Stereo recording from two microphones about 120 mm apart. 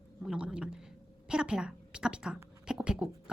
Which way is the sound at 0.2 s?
5° right (ahead or behind).